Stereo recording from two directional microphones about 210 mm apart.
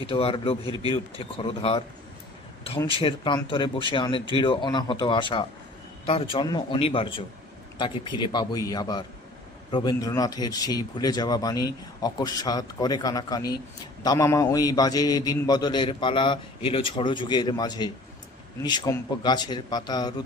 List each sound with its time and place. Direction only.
0.0 s a man's voice: 25° left (ahead or behind)
2.8 s a man's voice: 25° left (ahead or behind)